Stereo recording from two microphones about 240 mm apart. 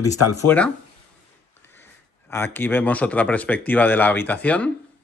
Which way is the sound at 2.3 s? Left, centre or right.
Centre.